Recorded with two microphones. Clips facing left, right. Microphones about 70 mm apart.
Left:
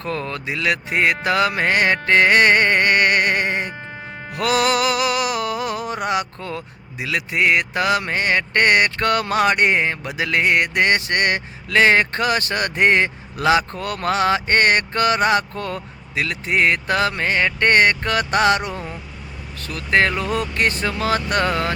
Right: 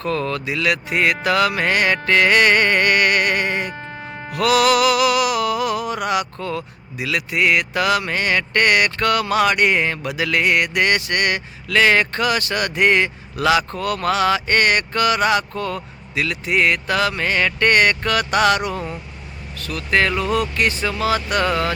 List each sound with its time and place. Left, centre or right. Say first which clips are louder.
0.0 s speech: right 4 dB; left
4.3 s mantra: right 3 dB; left